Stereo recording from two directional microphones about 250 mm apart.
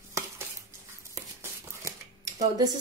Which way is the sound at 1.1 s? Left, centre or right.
Centre.